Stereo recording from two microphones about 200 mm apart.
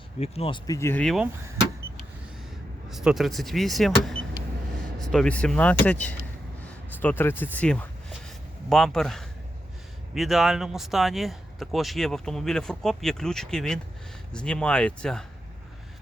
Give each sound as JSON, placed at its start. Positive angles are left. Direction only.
{"t": 0.2, "sound": "speech", "side_deg": 30}
{"t": 0.8, "sound": "speech", "side_deg": 10}
{"t": 2.9, "sound": "speech", "side_deg": -5}